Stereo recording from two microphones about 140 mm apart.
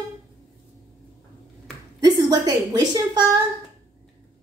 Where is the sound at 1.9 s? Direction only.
25° right (ahead or behind).